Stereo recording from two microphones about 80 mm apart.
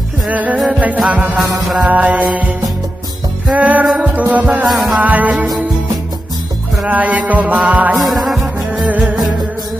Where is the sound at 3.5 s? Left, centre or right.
Centre.